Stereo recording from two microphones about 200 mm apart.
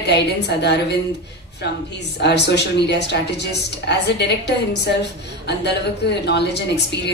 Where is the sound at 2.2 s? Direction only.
60° left (ahead or behind).